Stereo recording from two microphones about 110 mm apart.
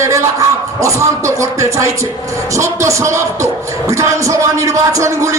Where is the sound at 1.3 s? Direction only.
30° right (ahead or behind).